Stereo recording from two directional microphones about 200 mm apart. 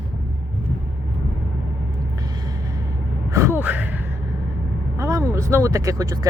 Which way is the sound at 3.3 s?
15° right (ahead or behind).